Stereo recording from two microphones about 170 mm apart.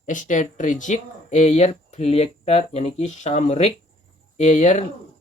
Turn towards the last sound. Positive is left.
turn(degrees=45)  # may be behind; listen again after turning